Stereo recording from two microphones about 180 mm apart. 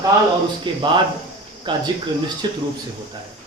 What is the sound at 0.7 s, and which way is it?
Speech, 25° right (ahead or behind).